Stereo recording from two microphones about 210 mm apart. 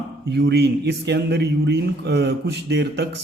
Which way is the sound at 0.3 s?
50° right (ahead or behind).